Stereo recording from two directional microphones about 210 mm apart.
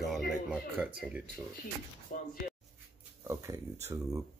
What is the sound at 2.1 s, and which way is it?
Speech, 40° left (ahead or behind).